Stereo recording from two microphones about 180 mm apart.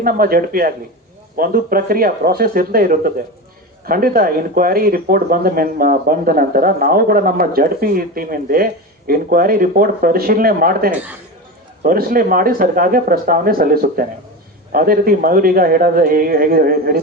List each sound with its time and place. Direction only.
0.0 s speech: 55° right (ahead or behind)